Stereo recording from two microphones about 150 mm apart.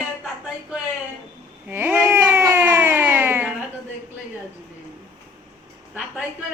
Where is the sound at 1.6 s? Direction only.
15° right (ahead or behind).